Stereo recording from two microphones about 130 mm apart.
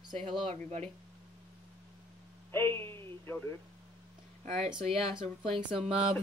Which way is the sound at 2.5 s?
20° left (ahead or behind).